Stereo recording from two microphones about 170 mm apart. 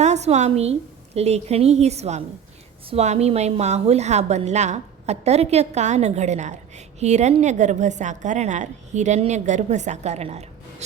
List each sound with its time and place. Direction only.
0.0 s a woman's voice: 40° right (ahead or behind)